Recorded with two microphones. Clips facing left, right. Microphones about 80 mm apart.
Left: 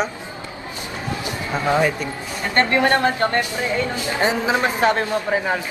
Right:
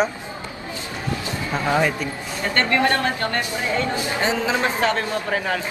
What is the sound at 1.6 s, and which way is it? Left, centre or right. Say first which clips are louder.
A man's voice: left 2 dB; centre.